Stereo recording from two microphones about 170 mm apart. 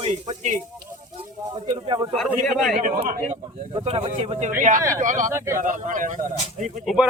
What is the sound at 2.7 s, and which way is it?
Speech, 55° right (ahead or behind).